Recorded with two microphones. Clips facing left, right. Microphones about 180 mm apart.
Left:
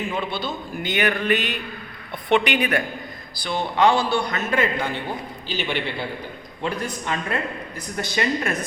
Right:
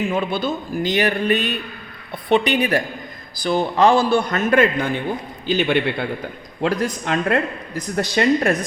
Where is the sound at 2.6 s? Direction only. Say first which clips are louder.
Right 3 dB; 30° right (ahead or behind).